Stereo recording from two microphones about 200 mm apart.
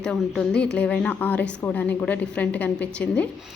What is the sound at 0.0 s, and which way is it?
A woman's voice, 5° left (ahead or behind).